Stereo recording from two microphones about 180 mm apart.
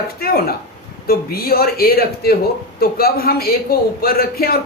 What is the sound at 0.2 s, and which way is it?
A man's voice, 55° left (ahead or behind).